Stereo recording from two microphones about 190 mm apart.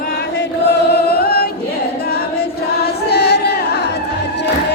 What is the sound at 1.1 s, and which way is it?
Choir, 55° left (ahead or behind).